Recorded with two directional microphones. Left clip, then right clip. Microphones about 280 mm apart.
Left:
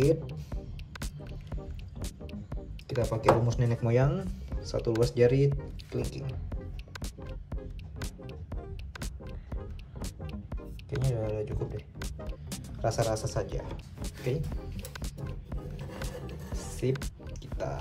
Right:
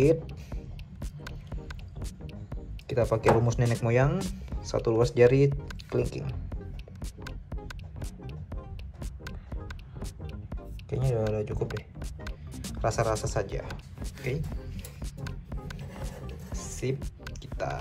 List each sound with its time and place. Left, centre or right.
0.0 s music: centre
11.3 s speech: centre
12.8 s speech: centre
14.5 s music: centre
16.5 s music: centre
17.6 s speech: centre